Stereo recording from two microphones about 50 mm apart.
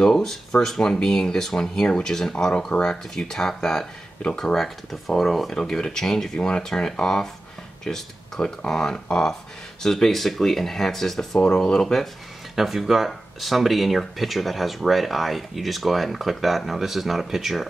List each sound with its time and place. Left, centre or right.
0.0 s speech: centre
12.5 s speech: centre